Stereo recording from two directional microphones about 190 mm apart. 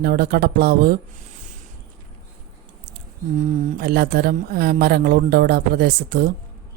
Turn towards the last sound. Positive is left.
turn(degrees=-55)  # may be behind; listen again after turning